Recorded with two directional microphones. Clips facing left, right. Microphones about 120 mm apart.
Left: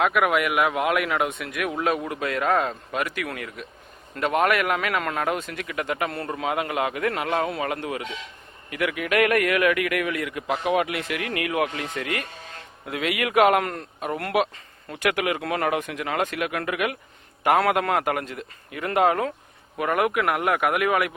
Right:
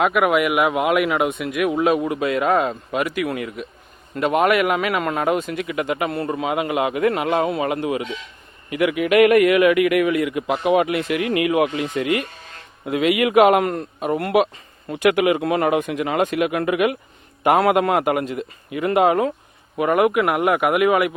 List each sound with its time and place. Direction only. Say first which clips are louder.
0.0 s a man's voice: right 4 dB; 10° right (ahead or behind)